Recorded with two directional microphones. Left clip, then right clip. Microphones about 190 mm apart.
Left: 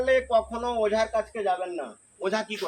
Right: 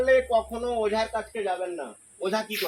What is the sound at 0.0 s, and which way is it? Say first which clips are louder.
Speech: right 1 dB; 15° right (ahead or behind).